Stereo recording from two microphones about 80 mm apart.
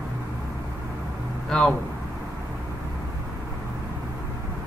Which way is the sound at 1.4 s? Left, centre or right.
Centre.